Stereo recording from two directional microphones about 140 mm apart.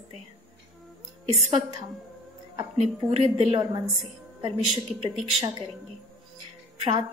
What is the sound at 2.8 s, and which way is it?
A woman's voice, 45° right (ahead or behind).